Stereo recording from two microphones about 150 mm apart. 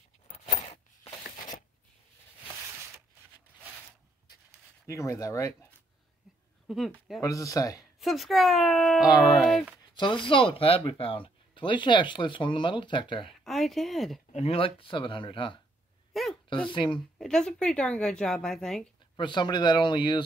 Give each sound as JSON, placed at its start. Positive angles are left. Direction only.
{"t": 0.6, "sound": "a sound", "side_deg": 50}
{"t": 4.8, "sound": "speech", "side_deg": 20}
{"t": 6.7, "sound": "speech", "side_deg": 0}
{"t": 7.2, "sound": "speech", "side_deg": 20}
{"t": 8.0, "sound": "speech", "side_deg": 0}
{"t": 9.9, "sound": "speech", "side_deg": 35}
{"t": 13.3, "sound": "speech", "side_deg": 0}
{"t": 14.3, "sound": "speech", "side_deg": 40}
{"t": 16.1, "sound": "a sound", "side_deg": 0}
{"t": 16.6, "sound": "speech", "side_deg": 35}
{"t": 17.2, "sound": "speech", "side_deg": 5}
{"t": 19.1, "sound": "speech", "side_deg": 30}